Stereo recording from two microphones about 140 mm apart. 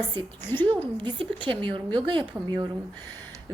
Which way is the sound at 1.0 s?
35° right (ahead or behind).